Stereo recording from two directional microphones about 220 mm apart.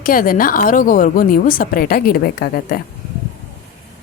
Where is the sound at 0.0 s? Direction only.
40° left (ahead or behind).